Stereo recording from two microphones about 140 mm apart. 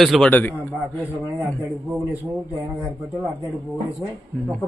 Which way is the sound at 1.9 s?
15° right (ahead or behind).